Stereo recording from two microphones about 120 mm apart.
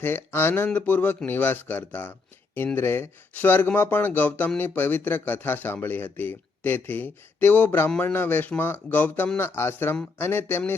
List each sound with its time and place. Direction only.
0.0 s speech: 15° left (ahead or behind)